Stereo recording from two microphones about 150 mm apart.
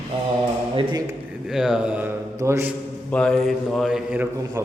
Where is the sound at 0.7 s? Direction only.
30° right (ahead or behind).